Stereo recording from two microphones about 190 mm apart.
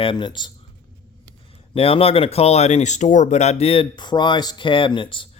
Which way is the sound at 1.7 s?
30° left (ahead or behind).